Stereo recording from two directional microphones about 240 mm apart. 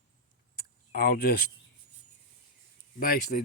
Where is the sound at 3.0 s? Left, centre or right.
Left.